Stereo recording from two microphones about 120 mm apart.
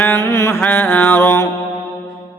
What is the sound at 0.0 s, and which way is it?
Mantra, 20° left (ahead or behind).